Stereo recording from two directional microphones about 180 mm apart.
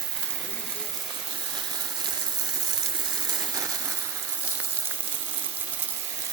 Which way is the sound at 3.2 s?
20° right (ahead or behind).